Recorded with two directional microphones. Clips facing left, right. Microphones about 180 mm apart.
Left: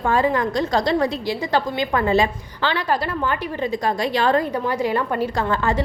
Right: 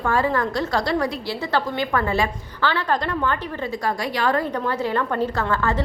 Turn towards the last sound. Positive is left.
turn(degrees=15)  # may be behind; listen again after turning